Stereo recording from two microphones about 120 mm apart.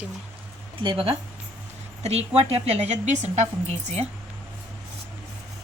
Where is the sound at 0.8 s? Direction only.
45° right (ahead or behind).